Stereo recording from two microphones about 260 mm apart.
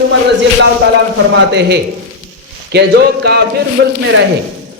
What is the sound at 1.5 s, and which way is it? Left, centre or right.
A man's voice, right.